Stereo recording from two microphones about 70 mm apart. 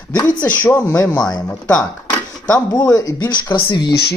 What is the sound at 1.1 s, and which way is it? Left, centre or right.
Speech, left.